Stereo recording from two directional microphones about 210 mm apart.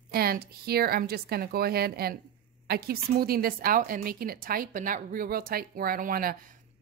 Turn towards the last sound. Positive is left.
turn(degrees=-45)  # may be behind; listen again after turning